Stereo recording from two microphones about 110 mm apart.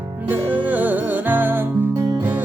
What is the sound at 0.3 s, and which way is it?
Music, 15° right (ahead or behind).